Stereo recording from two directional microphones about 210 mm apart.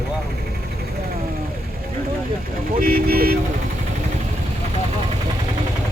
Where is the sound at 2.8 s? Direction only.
45° right (ahead or behind).